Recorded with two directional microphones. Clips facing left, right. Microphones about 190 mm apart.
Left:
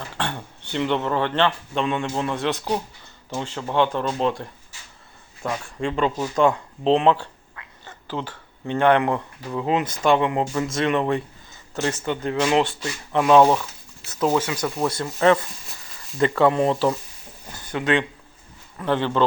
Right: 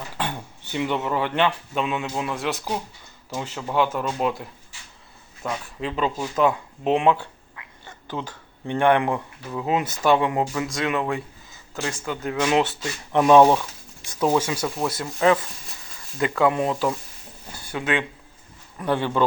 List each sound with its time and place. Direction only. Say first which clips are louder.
0.2 s a man's voice: even; 10° right (ahead or behind)
16.5 s speech: left 3 dB; 30° left (ahead or behind)
17.5 s speech: left 3 dB; 10° right (ahead or behind)